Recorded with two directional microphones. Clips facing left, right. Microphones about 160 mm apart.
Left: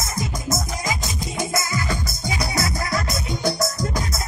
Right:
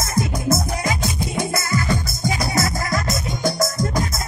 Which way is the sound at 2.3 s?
50° right (ahead or behind).